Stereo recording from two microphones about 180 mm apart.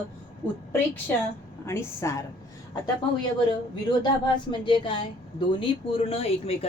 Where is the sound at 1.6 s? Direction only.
15° left (ahead or behind).